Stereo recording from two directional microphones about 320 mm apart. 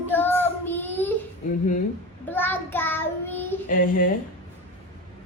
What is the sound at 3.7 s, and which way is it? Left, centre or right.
Speech, left.